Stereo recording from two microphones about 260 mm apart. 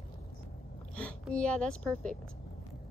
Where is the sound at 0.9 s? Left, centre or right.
Centre.